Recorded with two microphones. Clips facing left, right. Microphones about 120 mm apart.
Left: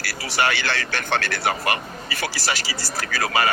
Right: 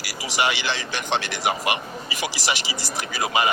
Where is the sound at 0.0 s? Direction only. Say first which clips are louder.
Left 1 dB; 15° right (ahead or behind).